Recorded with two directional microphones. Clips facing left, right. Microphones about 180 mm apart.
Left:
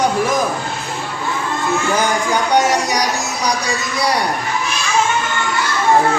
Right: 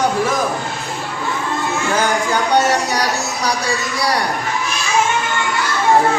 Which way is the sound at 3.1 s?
20° left (ahead or behind).